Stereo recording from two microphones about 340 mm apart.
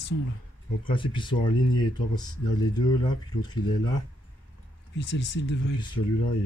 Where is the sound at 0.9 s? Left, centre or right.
Centre.